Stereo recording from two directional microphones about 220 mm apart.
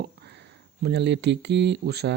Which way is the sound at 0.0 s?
50° right (ahead or behind).